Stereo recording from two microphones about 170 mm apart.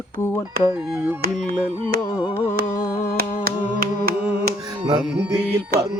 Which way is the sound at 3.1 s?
60° right (ahead or behind).